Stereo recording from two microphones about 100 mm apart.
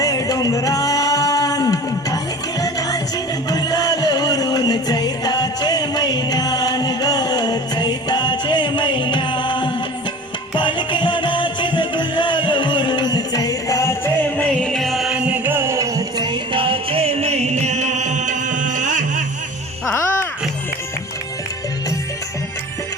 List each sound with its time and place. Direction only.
0.0 s singing: 35° left (ahead or behind)
2.6 s music: 40° left (ahead or behind)
14.3 s music: 10° left (ahead or behind); by 17.5 s 90° right